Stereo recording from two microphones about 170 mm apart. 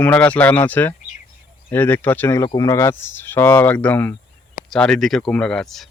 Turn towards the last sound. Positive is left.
turn(degrees=0)  # may be behind; listen again after turning